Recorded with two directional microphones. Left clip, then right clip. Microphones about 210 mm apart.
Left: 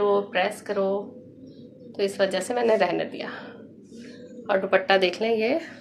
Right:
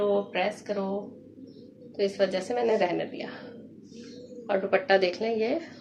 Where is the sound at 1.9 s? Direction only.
10° left (ahead or behind).